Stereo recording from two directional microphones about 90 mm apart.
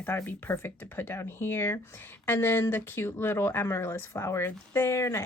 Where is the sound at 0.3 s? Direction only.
25° left (ahead or behind).